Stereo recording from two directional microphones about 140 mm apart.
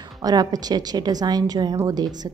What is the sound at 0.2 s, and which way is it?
A woman's voice, 30° right (ahead or behind).